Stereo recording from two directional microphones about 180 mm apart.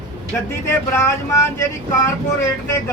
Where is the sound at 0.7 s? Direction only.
15° left (ahead or behind).